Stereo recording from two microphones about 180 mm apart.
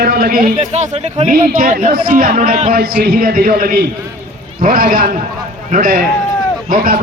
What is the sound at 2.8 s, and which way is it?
A man's voice, 60° right (ahead or behind).